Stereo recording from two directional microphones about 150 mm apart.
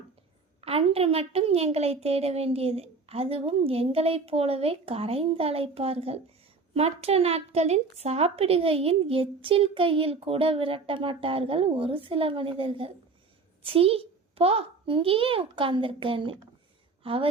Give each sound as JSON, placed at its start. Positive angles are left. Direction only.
{"t": 0.6, "sound": "a woman's voice", "side_deg": -40}